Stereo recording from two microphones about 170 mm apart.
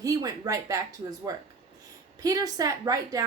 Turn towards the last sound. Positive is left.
turn(degrees=-20)  # may be behind; listen again after turning